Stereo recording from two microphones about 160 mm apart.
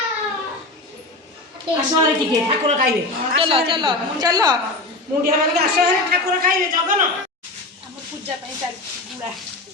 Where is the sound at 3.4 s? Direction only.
35° right (ahead or behind).